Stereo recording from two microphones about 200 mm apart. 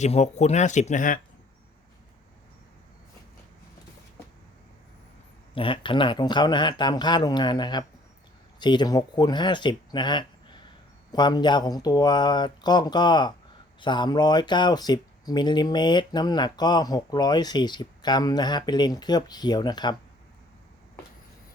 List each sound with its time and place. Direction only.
0.0 s speech: 35° left (ahead or behind)
5.5 s speech: 25° left (ahead or behind)